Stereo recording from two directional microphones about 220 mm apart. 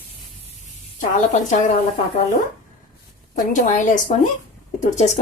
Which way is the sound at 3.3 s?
35° left (ahead or behind).